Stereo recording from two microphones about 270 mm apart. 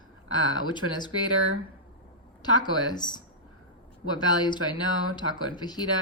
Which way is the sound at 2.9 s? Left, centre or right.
Centre.